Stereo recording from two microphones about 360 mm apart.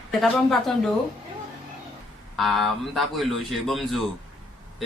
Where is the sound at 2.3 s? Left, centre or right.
Centre.